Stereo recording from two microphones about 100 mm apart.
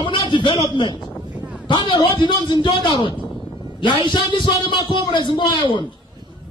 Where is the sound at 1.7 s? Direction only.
50° left (ahead or behind).